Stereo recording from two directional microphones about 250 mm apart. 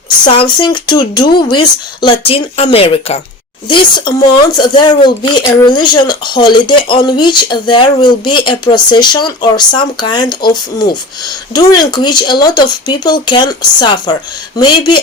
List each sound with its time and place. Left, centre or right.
0.3 s a woman's voice: centre